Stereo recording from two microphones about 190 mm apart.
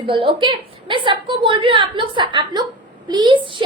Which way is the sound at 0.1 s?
25° right (ahead or behind).